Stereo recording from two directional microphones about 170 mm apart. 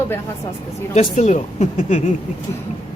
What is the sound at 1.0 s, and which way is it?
Speech, 40° left (ahead or behind).